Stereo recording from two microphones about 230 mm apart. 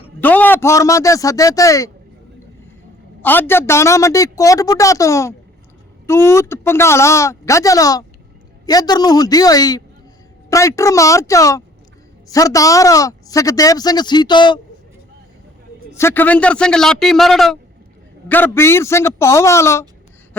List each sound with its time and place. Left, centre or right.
0.2 s speech: centre
3.2 s speech: centre
16.0 s a man's voice: centre